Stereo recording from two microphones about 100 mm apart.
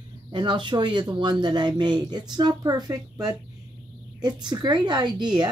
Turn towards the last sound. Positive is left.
turn(degrees=-50)  # may be behind; listen again after turning